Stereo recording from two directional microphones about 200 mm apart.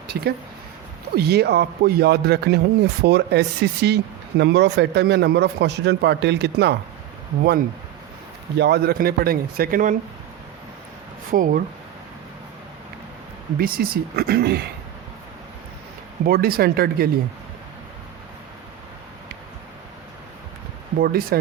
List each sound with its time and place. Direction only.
0.1 s speech: 60° right (ahead or behind)
8.5 s speech: 55° right (ahead or behind)
11.3 s speech: 45° right (ahead or behind)
13.6 s speech: 45° right (ahead or behind)
16.2 s speech: 50° right (ahead or behind)
21.0 s speech: 50° right (ahead or behind)